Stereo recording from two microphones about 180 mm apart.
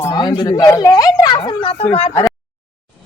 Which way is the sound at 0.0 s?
20° left (ahead or behind).